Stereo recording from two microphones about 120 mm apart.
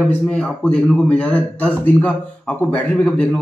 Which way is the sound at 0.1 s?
10° left (ahead or behind).